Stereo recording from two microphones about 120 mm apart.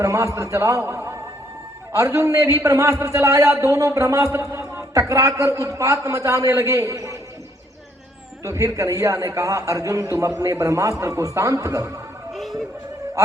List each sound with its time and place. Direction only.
0.0 s a man's voice: 25° right (ahead or behind)
8.4 s a man's voice: 25° right (ahead or behind)
12.3 s a sound: centre (ahead or behind)